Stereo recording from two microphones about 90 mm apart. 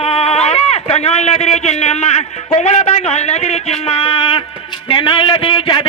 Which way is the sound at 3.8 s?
90° left.